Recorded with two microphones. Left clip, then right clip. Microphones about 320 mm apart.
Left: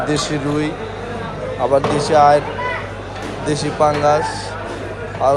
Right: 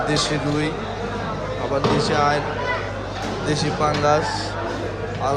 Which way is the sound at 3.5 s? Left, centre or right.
Centre.